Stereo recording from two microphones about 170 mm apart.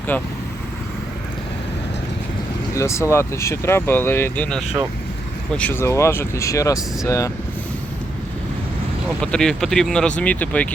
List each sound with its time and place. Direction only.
0.1 s speech: 10° left (ahead or behind)
2.7 s speech: 15° left (ahead or behind)
9.2 s speech: 5° left (ahead or behind)